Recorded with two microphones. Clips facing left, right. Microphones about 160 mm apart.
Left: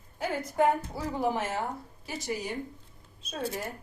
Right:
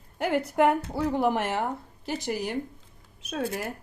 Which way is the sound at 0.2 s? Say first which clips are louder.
Right 4 dB; 70° right (ahead or behind).